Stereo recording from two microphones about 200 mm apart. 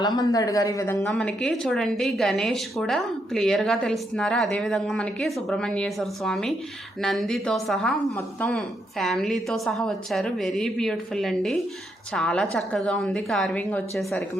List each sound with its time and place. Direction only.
0.2 s a woman's voice: 20° left (ahead or behind)
1.1 s a woman's voice: centre (ahead or behind)